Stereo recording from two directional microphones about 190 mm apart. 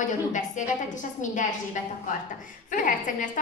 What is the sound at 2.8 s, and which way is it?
Speech, 45° left (ahead or behind).